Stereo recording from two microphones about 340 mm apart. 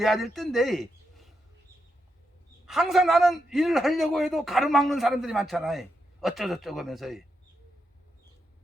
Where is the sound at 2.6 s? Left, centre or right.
Centre.